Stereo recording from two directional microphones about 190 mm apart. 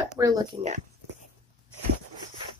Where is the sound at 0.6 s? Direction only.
40° right (ahead or behind).